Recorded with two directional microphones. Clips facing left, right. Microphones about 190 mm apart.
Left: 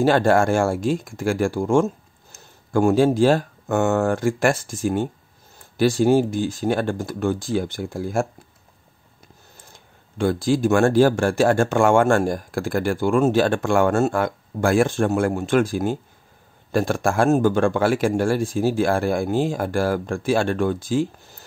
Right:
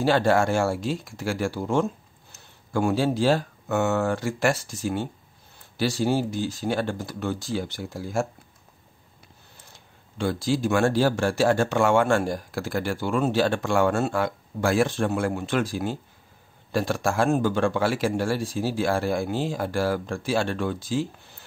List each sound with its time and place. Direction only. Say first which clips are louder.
0.0 s speech: left 4 dB; 50° left (ahead or behind)
10.1 s speech: left 5 dB; 50° left (ahead or behind)